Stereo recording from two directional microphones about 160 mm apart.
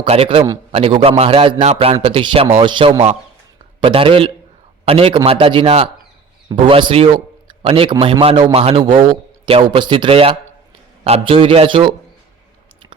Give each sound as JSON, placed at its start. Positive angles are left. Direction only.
{"t": 0.0, "sound": "a man's voice", "side_deg": -35}